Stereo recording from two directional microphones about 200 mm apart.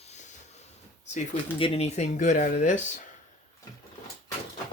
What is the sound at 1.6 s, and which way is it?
Speech, 30° left (ahead or behind).